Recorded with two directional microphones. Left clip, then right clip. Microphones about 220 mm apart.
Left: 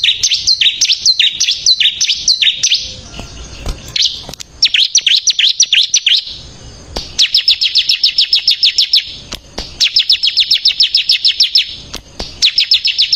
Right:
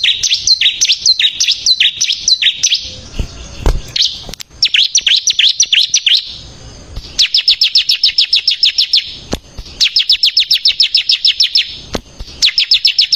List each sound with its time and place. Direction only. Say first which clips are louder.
0.0 s bird: even; 15° right (ahead or behind)
4.3 s bird: left 1 dB; 15° right (ahead or behind)
7.2 s chirp: even; 25° right (ahead or behind)
9.7 s chirp: even; 25° right (ahead or behind)
12.4 s chirp: right 1 dB; 25° right (ahead or behind)